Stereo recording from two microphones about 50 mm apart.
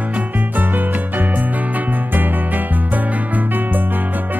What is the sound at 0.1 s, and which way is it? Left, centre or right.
Music, right.